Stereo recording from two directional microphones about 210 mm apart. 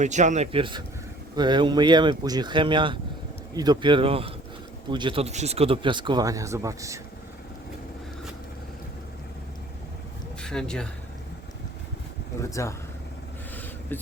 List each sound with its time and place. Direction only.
0.0 s speech: 35° right (ahead or behind); by 7.0 s 15° right (ahead or behind)
10.4 s speech: 5° left (ahead or behind)
12.4 s speech: 15° left (ahead or behind)
13.9 s speech: 10° left (ahead or behind)